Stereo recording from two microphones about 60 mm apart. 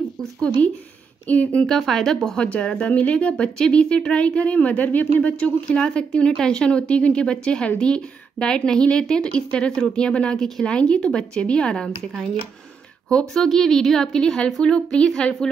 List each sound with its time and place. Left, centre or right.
0.2 s a sound: centre
1.2 s a woman's voice: left
1.7 s speech: centre
2.3 s a woman's voice: centre